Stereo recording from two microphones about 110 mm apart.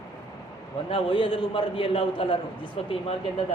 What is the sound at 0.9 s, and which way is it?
A man's voice, 50° left (ahead or behind).